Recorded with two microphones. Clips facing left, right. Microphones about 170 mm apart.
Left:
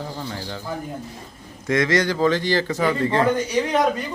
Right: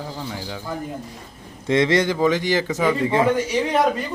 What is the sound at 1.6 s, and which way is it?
A man's voice, 25° right (ahead or behind).